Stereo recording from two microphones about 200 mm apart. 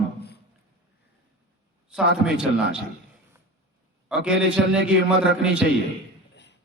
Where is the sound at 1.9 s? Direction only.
5° right (ahead or behind).